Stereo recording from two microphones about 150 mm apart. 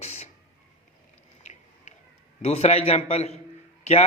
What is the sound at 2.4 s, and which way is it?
A man's voice, 45° left (ahead or behind).